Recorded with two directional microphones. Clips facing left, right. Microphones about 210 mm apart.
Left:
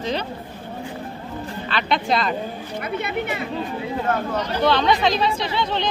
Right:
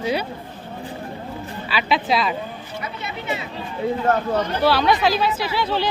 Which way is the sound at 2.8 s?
55° left (ahead or behind).